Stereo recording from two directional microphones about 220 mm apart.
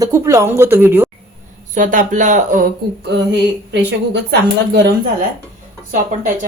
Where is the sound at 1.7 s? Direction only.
35° right (ahead or behind).